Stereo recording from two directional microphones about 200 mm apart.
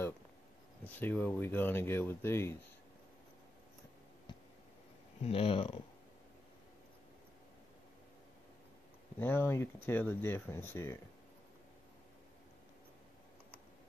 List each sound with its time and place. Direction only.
0.8 s speech: 10° left (ahead or behind)
5.2 s speech: 30° left (ahead or behind)
9.2 s speech: 10° left (ahead or behind)